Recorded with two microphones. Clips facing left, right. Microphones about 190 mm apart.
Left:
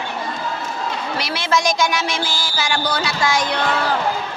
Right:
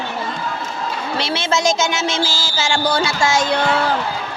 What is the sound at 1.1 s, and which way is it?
Speech, 25° right (ahead or behind).